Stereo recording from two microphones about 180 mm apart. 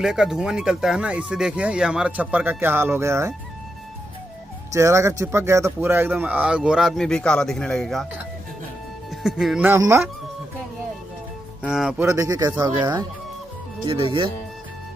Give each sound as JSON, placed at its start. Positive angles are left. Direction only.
{"t": 0.0, "sound": "speech", "side_deg": -5}
{"t": 4.7, "sound": "speech", "side_deg": -15}
{"t": 9.1, "sound": "speech", "side_deg": 0}
{"t": 11.6, "sound": "speech", "side_deg": -5}
{"t": 12.1, "sound": "speech", "side_deg": -20}